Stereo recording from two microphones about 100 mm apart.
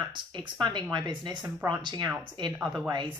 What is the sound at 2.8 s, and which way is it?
Speech, 50° right (ahead or behind).